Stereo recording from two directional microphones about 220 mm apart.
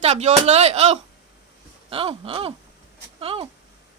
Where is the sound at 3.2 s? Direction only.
25° right (ahead or behind).